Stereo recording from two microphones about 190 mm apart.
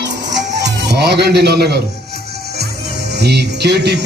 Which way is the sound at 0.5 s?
60° right (ahead or behind).